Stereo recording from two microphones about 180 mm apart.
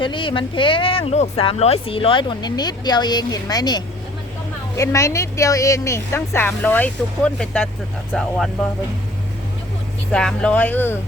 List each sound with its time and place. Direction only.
0.0 s speech: 30° left (ahead or behind); by 8.3 s 5° left (ahead or behind)
10.1 s speech: 5° left (ahead or behind)